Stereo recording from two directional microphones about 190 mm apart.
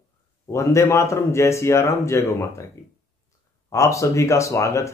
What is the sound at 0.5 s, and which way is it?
Speech, 15° left (ahead or behind).